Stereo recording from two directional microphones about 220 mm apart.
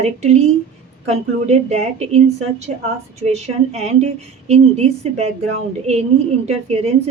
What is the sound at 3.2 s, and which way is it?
A woman's voice, 30° right (ahead or behind).